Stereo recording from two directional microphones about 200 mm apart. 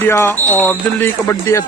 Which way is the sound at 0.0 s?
10° left (ahead or behind).